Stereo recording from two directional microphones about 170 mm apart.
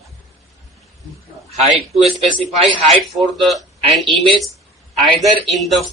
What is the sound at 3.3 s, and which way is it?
Speech, centre (ahead or behind).